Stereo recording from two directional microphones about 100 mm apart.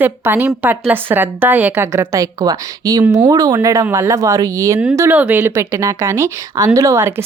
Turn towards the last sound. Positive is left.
turn(degrees=-25)  # may be behind; listen again after turning